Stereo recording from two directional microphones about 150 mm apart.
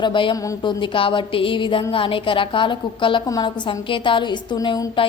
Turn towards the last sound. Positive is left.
turn(degrees=30)  # may be behind; listen again after turning